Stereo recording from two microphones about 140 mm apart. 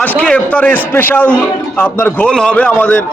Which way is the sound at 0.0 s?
10° left (ahead or behind).